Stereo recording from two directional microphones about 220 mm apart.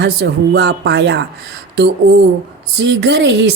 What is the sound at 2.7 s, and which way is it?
Speech, 50° right (ahead or behind).